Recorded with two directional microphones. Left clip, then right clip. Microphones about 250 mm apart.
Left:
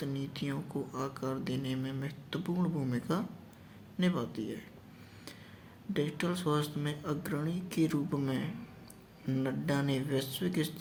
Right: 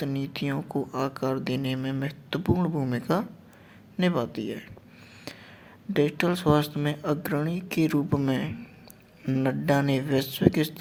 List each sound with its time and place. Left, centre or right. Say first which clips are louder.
0.0 s speech: right 8 dB; right
5.9 s speech: right 10 dB; right